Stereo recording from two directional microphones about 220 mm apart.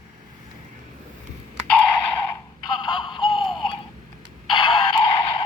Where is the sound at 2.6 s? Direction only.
20° left (ahead or behind).